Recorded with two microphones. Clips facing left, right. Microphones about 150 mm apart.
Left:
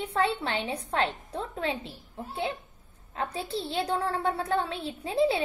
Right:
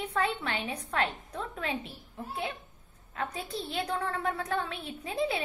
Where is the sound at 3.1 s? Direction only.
30° left (ahead or behind).